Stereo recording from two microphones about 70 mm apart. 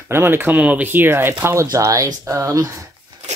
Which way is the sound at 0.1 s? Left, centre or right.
Right.